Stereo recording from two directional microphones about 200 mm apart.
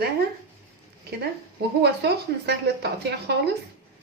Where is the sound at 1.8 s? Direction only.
55° right (ahead or behind).